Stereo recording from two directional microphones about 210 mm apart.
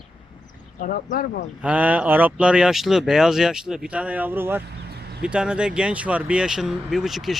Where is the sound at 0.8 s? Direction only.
40° left (ahead or behind).